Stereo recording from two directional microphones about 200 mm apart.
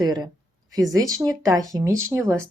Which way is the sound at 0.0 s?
20° right (ahead or behind).